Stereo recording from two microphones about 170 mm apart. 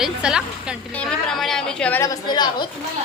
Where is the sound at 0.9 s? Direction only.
5° left (ahead or behind).